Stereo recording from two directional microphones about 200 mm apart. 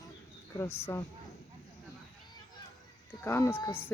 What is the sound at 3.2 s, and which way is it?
Speech, 10° left (ahead or behind).